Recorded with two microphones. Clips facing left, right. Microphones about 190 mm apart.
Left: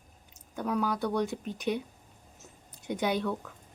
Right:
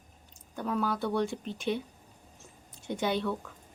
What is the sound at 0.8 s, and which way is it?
Speech, 15° left (ahead or behind).